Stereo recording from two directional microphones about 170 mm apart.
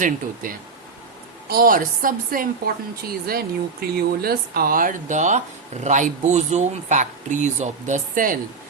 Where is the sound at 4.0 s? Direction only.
65° right (ahead or behind).